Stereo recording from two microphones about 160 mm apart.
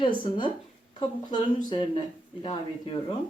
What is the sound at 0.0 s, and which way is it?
Speech, 30° left (ahead or behind).